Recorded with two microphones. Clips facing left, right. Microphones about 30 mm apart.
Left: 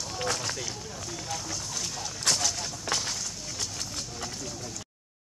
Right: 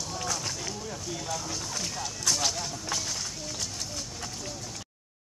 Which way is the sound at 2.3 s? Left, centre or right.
Left.